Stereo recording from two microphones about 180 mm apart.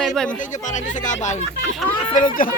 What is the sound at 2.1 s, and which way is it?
Speech, 50° left (ahead or behind).